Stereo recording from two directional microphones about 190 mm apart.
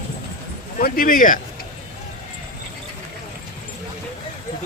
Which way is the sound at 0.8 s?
50° left (ahead or behind).